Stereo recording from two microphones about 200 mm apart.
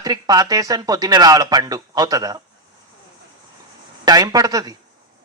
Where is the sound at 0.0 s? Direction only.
20° right (ahead or behind).